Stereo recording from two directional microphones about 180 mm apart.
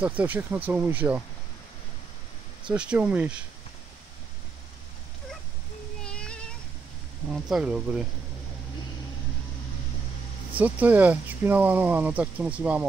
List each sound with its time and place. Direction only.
0.0 s speech: 5° right (ahead or behind)
2.6 s speech: 5° right (ahead or behind)
6.0 s cat: 5° left (ahead or behind)
7.2 s speech: centre (ahead or behind)
10.5 s speech: 10° right (ahead or behind)